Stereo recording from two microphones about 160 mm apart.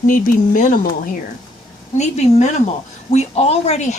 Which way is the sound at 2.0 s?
45° left (ahead or behind).